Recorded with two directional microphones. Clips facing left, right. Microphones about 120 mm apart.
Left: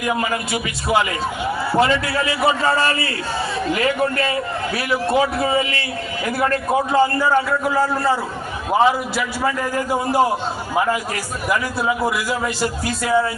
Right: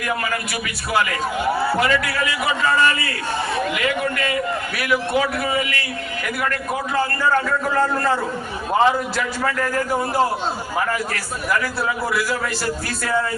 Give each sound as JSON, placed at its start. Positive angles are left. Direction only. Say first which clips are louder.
{"t": 0.0, "sound": "a man's voice", "louder": "left 3 dB", "side_deg": 20}
{"t": 7.2, "sound": "a man's voice", "louder": "left 2 dB", "side_deg": 10}